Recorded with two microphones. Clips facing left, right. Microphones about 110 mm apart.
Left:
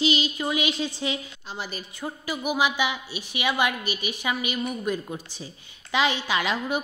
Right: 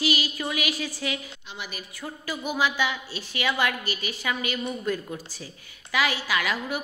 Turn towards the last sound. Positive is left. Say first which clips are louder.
# left 2 dB
turn(degrees=20)  # may be behind; listen again after turning